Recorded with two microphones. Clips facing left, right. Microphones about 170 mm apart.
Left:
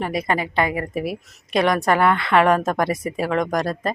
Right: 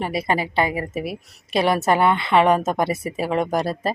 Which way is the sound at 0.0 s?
30° right (ahead or behind).